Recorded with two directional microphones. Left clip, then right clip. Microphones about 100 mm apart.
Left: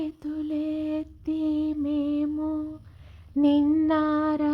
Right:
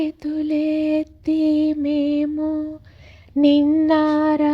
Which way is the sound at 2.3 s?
20° right (ahead or behind).